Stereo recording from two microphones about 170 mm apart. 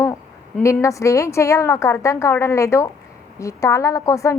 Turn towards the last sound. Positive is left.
turn(degrees=20)  # may be behind; listen again after turning